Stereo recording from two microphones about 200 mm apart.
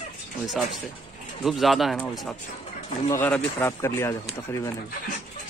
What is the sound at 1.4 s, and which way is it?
Speech, centre (ahead or behind).